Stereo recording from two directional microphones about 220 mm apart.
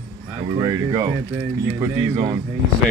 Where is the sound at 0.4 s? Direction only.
20° right (ahead or behind).